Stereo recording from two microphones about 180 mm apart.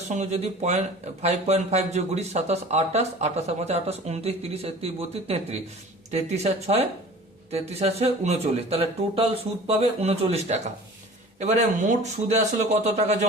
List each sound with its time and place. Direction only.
0.1 s speech: 40° right (ahead or behind)